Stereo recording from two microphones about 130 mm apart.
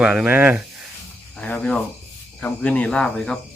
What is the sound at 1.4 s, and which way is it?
Cricket, 10° left (ahead or behind).